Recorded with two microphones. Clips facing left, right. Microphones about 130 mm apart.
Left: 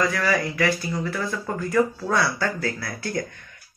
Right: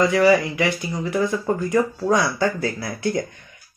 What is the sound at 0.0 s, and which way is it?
Speech, 20° right (ahead or behind).